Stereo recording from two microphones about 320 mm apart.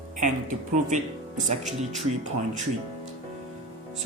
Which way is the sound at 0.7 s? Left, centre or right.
Right.